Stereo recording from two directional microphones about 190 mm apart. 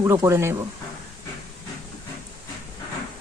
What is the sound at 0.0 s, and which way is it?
Speech, 15° right (ahead or behind).